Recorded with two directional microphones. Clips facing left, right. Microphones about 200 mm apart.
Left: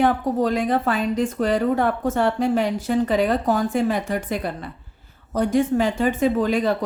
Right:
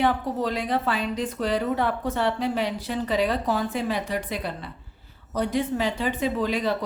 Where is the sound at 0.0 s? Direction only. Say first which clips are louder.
Left 5 dB; 45° left (ahead or behind).